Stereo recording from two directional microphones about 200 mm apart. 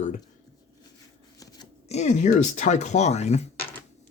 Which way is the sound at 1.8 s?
35° left (ahead or behind).